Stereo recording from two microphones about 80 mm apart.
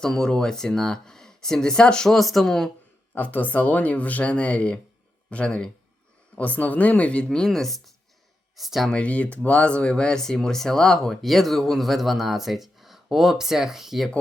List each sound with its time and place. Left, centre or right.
0.0 s speech: centre
3.2 s speech: left; by 8.9 s centre
8.9 s speech: centre